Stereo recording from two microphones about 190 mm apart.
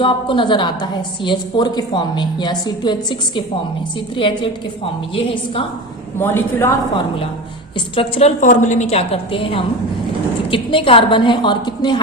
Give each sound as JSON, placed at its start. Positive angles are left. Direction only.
{"t": 0.0, "sound": "a woman's voice", "side_deg": 25}
{"t": 6.1, "sound": "a woman's voice", "side_deg": 10}
{"t": 7.9, "sound": "a woman's voice", "side_deg": 30}
{"t": 8.4, "sound": "a woman's voice", "side_deg": 40}